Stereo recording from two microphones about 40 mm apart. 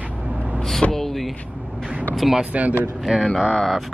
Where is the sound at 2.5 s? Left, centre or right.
Right.